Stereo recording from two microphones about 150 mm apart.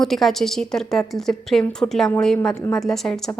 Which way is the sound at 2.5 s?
20° left (ahead or behind).